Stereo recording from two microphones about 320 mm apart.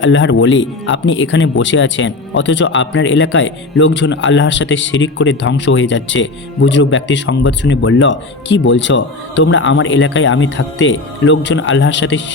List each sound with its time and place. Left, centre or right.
0.0 s speech: left